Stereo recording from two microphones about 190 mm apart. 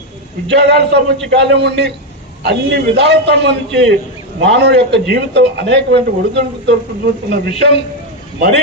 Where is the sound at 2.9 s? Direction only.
65° right (ahead or behind).